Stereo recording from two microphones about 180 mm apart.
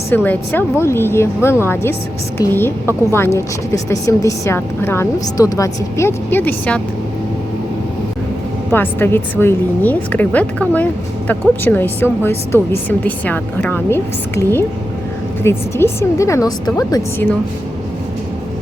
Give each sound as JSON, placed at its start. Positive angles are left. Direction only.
{"t": 0.1, "sound": "a woman's voice", "side_deg": 10}
{"t": 8.7, "sound": "a woman's voice", "side_deg": 10}